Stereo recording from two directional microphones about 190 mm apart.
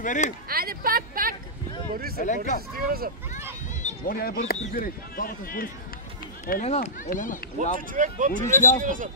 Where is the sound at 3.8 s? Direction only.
45° left (ahead or behind).